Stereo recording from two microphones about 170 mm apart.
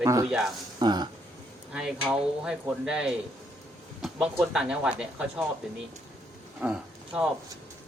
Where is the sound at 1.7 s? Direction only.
5° right (ahead or behind).